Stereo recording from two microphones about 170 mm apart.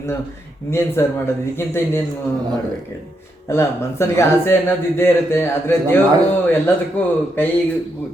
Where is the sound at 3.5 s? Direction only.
15° left (ahead or behind).